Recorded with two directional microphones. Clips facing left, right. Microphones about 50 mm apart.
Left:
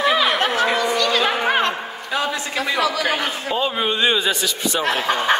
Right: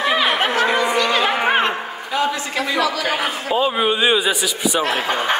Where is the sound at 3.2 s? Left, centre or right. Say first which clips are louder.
Right 3 dB; centre.